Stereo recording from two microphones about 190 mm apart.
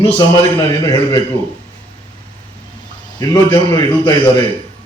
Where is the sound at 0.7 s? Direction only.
20° left (ahead or behind).